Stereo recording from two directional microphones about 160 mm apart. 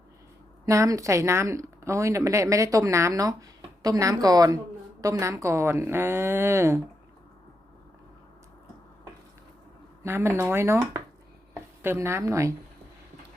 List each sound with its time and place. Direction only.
0.6 s a woman's voice: 20° right (ahead or behind)
10.0 s a woman's voice: 15° right (ahead or behind)